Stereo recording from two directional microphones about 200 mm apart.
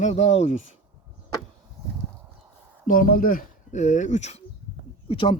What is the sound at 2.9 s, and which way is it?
Speech, 45° left (ahead or behind).